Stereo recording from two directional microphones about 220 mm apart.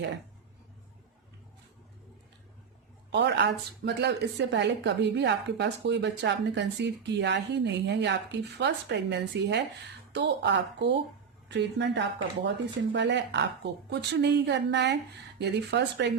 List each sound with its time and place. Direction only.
3.1 s a woman's voice: 50° right (ahead or behind)